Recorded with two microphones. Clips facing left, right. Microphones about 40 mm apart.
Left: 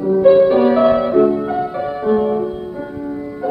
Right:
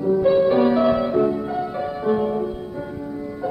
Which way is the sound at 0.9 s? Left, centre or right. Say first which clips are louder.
Left 6 dB; centre.